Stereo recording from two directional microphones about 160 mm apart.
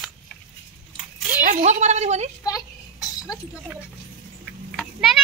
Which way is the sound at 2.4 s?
25° left (ahead or behind).